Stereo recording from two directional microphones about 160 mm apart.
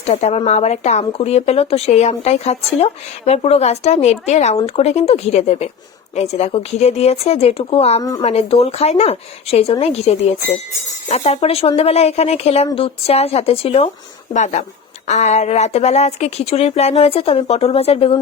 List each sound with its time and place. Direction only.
0.0 s speech: 40° left (ahead or behind)
14.3 s speech: 50° left (ahead or behind)